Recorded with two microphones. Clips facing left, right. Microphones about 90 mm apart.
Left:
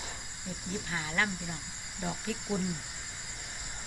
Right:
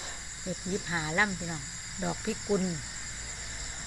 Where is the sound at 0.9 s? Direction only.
15° right (ahead or behind).